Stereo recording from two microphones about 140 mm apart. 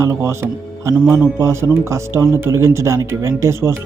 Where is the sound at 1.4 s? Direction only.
20° right (ahead or behind).